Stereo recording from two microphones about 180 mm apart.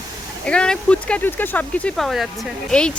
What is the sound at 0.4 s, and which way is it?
Speech, 5° left (ahead or behind).